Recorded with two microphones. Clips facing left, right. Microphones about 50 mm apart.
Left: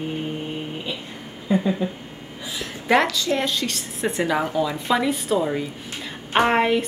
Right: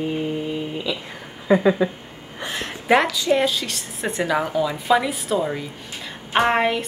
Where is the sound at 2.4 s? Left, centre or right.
Right.